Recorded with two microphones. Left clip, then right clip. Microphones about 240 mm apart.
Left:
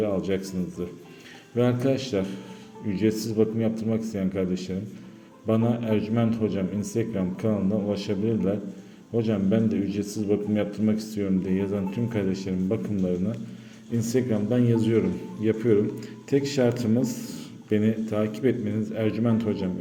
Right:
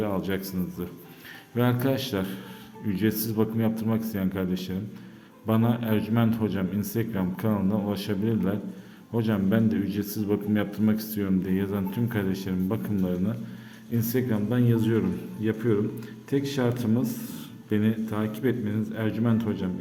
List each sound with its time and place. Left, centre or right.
0.0 s a man's voice: centre